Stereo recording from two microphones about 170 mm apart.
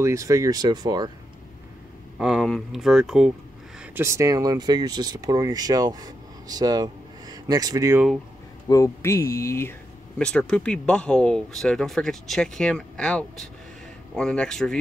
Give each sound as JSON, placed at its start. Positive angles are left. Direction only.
{"t": 0.0, "sound": "speech", "side_deg": -20}
{"t": 2.1, "sound": "speech", "side_deg": 0}
{"t": 3.9, "sound": "speech", "side_deg": -15}
{"t": 8.6, "sound": "speech", "side_deg": 20}
{"t": 10.1, "sound": "speech", "side_deg": 5}